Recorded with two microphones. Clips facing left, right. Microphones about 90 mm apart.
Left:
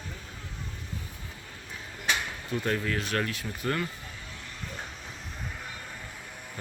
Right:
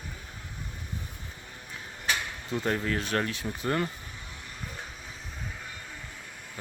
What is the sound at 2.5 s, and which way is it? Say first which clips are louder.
Speech: right 1 dB; 25° right (ahead or behind).